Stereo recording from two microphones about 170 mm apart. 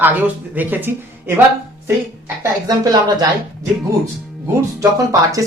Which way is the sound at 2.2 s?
20° right (ahead or behind).